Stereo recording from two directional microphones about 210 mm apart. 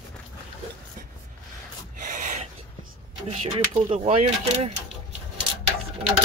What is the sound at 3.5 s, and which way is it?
Speech, 25° right (ahead or behind).